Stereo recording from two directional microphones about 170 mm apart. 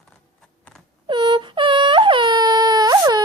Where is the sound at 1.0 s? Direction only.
25° right (ahead or behind).